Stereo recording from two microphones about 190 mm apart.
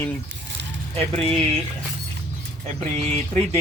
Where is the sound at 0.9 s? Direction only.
30° right (ahead or behind).